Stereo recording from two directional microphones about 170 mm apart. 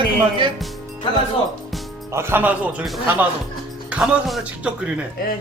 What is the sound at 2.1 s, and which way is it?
A man's voice, 15° right (ahead or behind).